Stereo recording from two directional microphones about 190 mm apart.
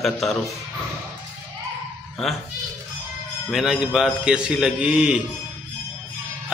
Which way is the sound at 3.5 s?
5° right (ahead or behind).